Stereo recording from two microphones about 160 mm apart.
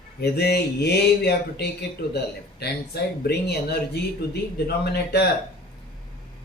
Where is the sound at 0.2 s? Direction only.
90° left.